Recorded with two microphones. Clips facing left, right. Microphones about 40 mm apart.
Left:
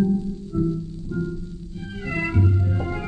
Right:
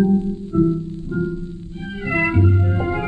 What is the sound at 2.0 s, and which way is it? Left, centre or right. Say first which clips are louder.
Music: right 6 dB; right.